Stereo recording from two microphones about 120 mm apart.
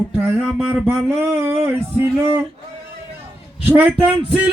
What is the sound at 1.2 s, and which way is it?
Speech, 20° right (ahead or behind).